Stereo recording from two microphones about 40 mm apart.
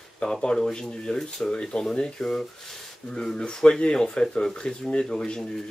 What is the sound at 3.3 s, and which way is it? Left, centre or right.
Speech, left.